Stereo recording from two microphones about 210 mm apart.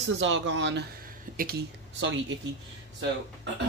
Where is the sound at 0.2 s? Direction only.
60° right (ahead or behind).